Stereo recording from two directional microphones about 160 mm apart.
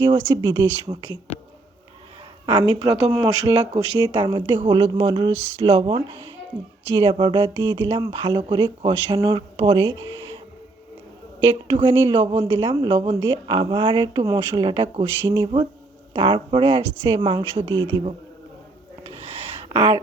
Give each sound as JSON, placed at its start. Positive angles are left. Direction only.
{"t": 0.0, "sound": "speech", "side_deg": -30}
{"t": 2.5, "sound": "speech", "side_deg": -30}
{"t": 11.7, "sound": "speech", "side_deg": -35}
{"t": 19.6, "sound": "speech", "side_deg": -30}